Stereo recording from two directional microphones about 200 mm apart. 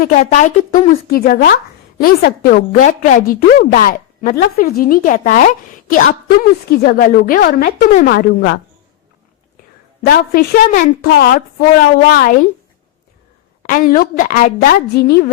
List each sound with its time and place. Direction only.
0.0 s a woman's voice: 35° left (ahead or behind)
6.7 s a woman's voice: 45° left (ahead or behind)
10.1 s a woman's voice: 50° left (ahead or behind)
13.6 s a woman's voice: 45° left (ahead or behind)